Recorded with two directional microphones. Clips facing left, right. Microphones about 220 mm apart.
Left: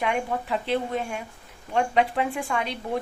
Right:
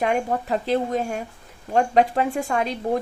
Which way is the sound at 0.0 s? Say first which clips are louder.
Right 4 dB; 40° right (ahead or behind).